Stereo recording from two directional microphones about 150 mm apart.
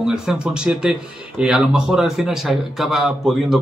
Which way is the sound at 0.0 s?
5° right (ahead or behind).